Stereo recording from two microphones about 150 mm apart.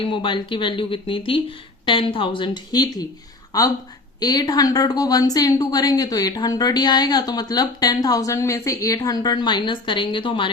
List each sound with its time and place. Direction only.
0.0 s a woman's voice: 35° left (ahead or behind)